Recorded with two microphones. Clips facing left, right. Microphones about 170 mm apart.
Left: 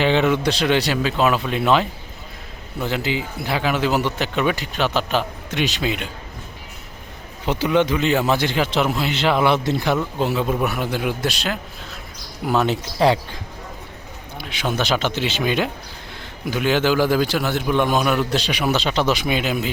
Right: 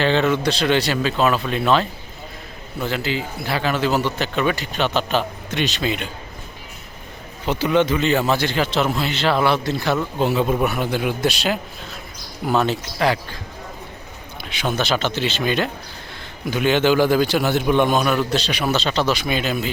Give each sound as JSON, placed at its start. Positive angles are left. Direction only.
{"t": 0.0, "sound": "a man's voice", "side_deg": 15}
{"t": 7.4, "sound": "a man's voice", "side_deg": 15}
{"t": 10.2, "sound": "a man's voice", "side_deg": 0}
{"t": 12.5, "sound": "a man's voice", "side_deg": 10}
{"t": 12.7, "sound": "speech", "side_deg": 25}
{"t": 14.6, "sound": "a man's voice", "side_deg": 10}